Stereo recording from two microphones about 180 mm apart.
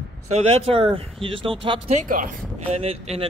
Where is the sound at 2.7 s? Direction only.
35° right (ahead or behind).